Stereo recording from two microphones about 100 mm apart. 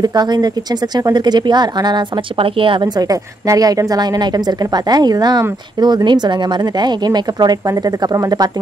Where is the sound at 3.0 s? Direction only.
35° right (ahead or behind).